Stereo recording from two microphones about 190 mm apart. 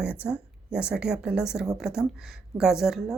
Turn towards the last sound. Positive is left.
turn(degrees=0)  # may be behind; listen again after turning